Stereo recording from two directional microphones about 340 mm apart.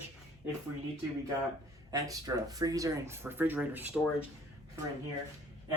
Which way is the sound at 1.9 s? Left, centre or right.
Centre.